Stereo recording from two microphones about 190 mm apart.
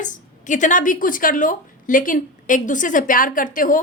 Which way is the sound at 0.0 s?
40° left (ahead or behind).